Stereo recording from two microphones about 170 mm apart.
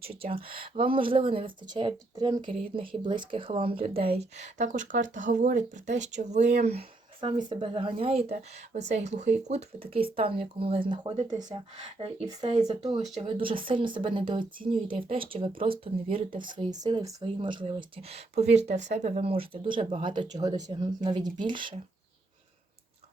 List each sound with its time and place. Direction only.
0.0 s speech: 35° right (ahead or behind)